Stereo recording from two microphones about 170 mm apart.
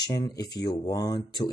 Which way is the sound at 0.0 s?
20° left (ahead or behind).